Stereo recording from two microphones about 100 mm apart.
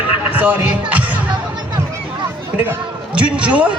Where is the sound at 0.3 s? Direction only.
15° right (ahead or behind).